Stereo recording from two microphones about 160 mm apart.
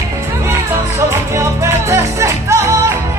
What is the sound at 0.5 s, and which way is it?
Music, 15° right (ahead or behind).